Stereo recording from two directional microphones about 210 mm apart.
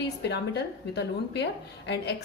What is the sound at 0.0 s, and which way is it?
A woman's voice, 55° left (ahead or behind).